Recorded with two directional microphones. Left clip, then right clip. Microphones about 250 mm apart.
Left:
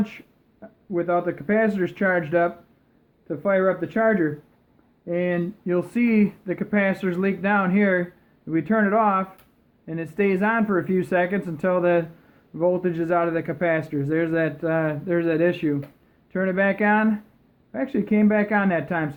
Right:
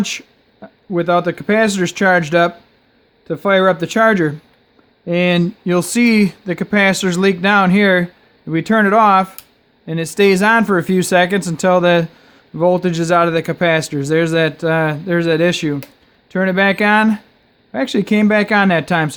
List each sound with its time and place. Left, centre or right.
0.6 s speech: right